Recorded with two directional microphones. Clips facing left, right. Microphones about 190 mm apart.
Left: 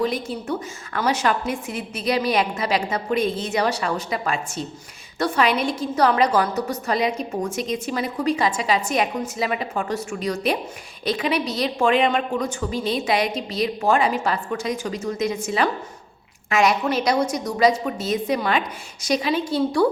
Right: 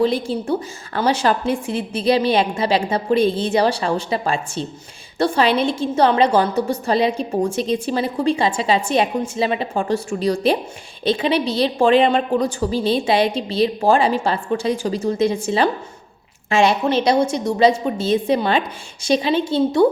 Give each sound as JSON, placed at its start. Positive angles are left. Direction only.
{"t": 0.0, "sound": "a woman's voice", "side_deg": -30}